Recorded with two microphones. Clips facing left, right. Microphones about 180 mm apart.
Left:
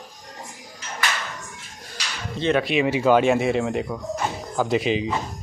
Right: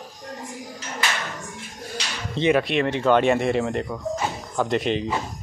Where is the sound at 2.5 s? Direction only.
Centre (ahead or behind).